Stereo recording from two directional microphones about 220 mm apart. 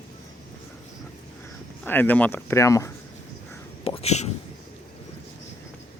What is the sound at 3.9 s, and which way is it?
Whispering, 30° left (ahead or behind).